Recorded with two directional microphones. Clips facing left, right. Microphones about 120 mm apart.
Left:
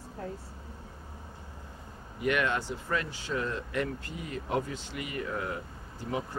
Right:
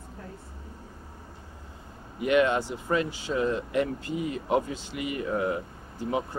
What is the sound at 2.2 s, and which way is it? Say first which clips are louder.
Speech: right 6 dB; 20° right (ahead or behind).